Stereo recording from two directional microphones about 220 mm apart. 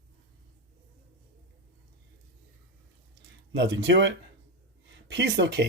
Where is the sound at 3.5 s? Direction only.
55° right (ahead or behind).